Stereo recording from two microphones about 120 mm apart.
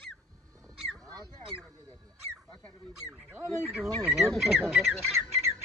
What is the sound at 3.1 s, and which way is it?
Speech, 15° right (ahead or behind).